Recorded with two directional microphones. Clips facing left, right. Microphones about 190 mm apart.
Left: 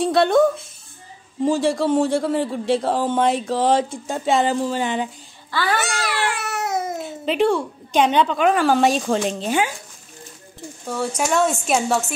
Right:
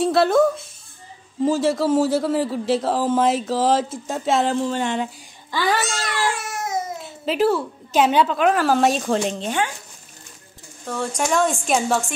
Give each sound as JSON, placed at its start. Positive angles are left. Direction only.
{"t": 0.0, "sound": "a man's voice", "side_deg": 0}
{"t": 5.5, "sound": "babbling", "side_deg": -15}
{"t": 5.8, "sound": "cat", "side_deg": 65}
{"t": 7.2, "sound": "a man's voice", "side_deg": -5}
{"t": 10.9, "sound": "a man's voice", "side_deg": 5}